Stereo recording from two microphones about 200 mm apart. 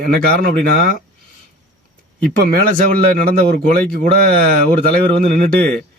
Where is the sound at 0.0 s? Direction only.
50° right (ahead or behind).